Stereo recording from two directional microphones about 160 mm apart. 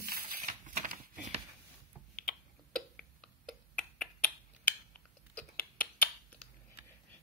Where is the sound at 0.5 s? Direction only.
55° right (ahead or behind).